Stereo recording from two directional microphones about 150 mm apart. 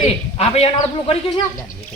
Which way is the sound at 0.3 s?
45° left (ahead or behind).